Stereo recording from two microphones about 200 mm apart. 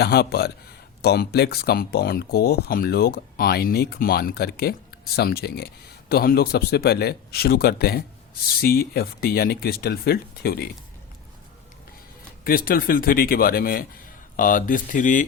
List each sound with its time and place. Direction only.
0.0 s speech: 55° left (ahead or behind)
12.5 s speech: 45° left (ahead or behind)